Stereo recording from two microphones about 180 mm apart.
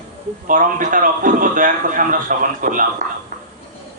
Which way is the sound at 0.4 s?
45° right (ahead or behind).